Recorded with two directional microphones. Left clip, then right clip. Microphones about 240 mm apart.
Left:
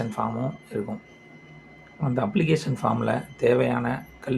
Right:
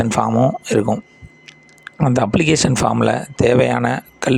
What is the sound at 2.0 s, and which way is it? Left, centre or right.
Speech, right.